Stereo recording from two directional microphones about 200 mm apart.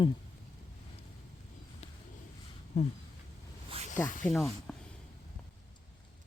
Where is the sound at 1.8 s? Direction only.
35° left (ahead or behind).